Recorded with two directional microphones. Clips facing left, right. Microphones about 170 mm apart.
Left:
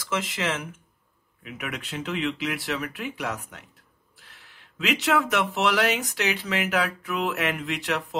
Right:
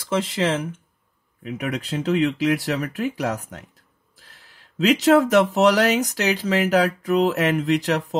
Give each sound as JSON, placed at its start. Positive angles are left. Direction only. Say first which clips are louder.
{"t": 0.0, "sound": "speech", "louder": "right 6 dB", "side_deg": -30}